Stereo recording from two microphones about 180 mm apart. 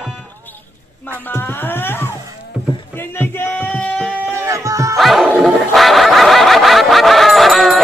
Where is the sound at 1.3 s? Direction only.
10° left (ahead or behind).